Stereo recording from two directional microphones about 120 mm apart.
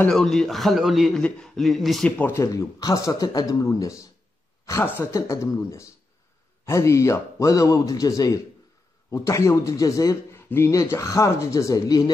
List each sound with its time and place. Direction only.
0.1 s a man's voice: 5° left (ahead or behind)
2.0 s speech: 10° left (ahead or behind)
2.3 s a man's voice: 25° left (ahead or behind)